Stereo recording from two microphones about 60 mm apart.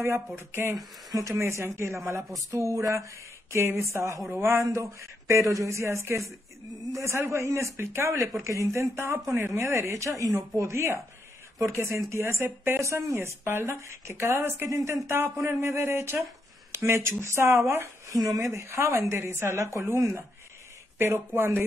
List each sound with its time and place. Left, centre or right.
0.0 s speech: right
0.7 s speech: right
1.6 s speech: right
3.5 s speech: right
18.1 s speech: right
18.5 s speech: right